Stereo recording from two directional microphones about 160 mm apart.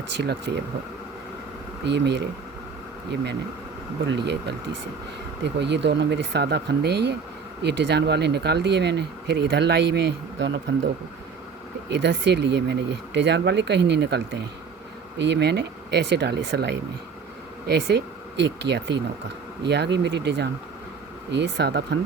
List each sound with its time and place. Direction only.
0.2 s speech: 90° right
1.8 s speech: 90° right
4.1 s speech: 90° right
11.9 s speech: 90° right